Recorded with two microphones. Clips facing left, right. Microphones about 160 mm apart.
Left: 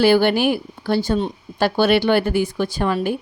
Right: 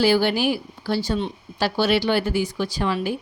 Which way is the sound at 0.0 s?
60° left (ahead or behind).